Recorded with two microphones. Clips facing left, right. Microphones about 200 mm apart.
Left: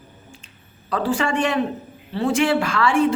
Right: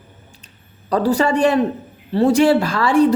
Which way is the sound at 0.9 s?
40° right (ahead or behind).